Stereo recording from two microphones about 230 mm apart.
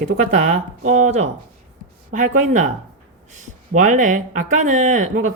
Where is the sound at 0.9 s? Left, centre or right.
Right.